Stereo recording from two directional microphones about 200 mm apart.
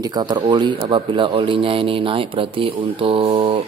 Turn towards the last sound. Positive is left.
turn(degrees=-25)  # may be behind; listen again after turning